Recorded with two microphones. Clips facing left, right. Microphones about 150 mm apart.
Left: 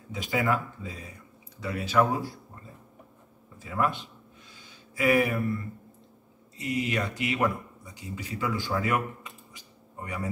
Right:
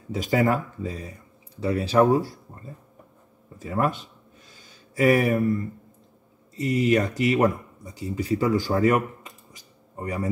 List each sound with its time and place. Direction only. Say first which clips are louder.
0.1 s speech: right 5 dB; 40° right (ahead or behind)
3.5 s speech: right 3 dB; 40° right (ahead or behind)
4.5 s a sound: even; 45° right (ahead or behind)
6.5 s speech: right 8 dB; 40° right (ahead or behind)